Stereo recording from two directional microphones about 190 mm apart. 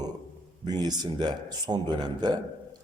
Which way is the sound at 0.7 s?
20° right (ahead or behind).